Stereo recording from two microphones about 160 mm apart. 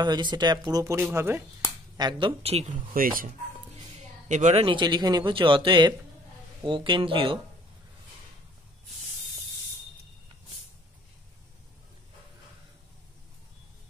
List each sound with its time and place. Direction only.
0.0 s speech: 25° right (ahead or behind)
2.0 s speech: 30° right (ahead or behind)
2.9 s speech: 60° right (ahead or behind)
4.0 s a sound: 50° right (ahead or behind)
4.6 s speech: 30° right (ahead or behind)